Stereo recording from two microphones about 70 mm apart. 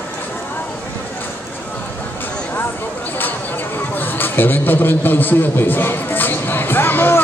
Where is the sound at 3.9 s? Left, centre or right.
Left.